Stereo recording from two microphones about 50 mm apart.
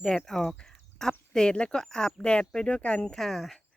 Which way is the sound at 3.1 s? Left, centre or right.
Centre.